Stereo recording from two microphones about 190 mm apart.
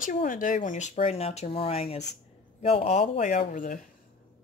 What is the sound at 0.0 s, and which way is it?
Speech, 45° left (ahead or behind).